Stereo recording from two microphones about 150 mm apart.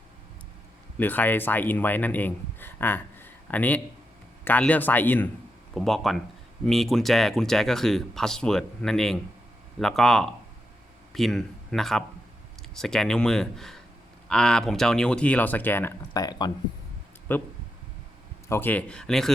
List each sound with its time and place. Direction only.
0.9 s speech: 10° left (ahead or behind)
5.7 s speech: centre (ahead or behind)
16.1 s speech: 25° left (ahead or behind)
17.3 s speech: 15° left (ahead or behind)